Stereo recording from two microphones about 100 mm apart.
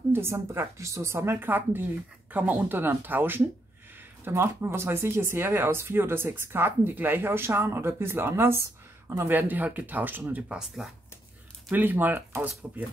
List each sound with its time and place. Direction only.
0.1 s speech: 25° right (ahead or behind)